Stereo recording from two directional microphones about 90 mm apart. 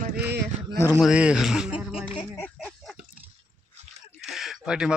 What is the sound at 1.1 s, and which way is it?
Speech, 15° right (ahead or behind).